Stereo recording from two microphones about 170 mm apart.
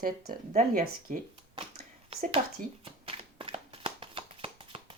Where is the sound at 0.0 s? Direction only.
60° right (ahead or behind).